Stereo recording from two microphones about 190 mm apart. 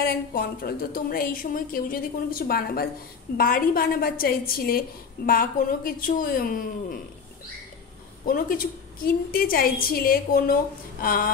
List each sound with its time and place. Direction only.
0.0 s a woman's voice: 50° left (ahead or behind)
8.3 s a woman's voice: 45° left (ahead or behind)